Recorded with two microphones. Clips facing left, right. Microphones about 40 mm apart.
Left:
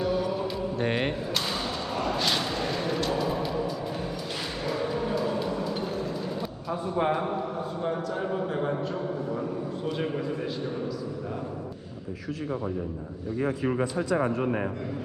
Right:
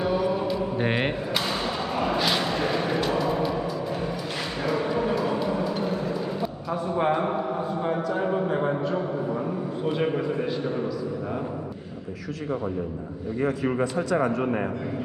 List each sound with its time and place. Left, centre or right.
0.0 s mantra: centre
0.8 s speech: centre
2.0 s a sound: centre
2.4 s a sound: right
3.2 s music: centre
4.6 s bow-wow: centre
5.6 s vehicle: centre
7.8 s a sound: centre
9.8 s a man's voice: centre